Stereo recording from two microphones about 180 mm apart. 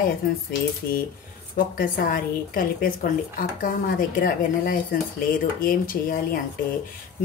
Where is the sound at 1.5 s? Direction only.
50° left (ahead or behind).